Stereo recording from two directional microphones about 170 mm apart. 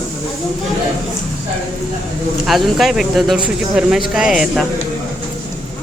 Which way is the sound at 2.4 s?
Centre (ahead or behind).